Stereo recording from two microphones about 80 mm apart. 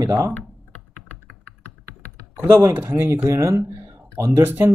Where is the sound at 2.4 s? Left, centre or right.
Right.